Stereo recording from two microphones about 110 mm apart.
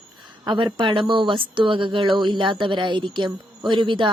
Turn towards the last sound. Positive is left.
turn(degrees=-45)  # may be behind; listen again after turning